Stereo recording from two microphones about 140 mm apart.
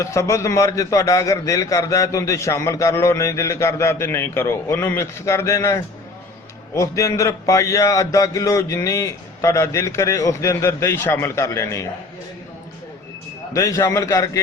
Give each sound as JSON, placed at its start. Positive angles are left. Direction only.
{"t": 0.0, "sound": "a man's voice", "side_deg": 20}
{"t": 13.5, "sound": "a man's voice", "side_deg": 25}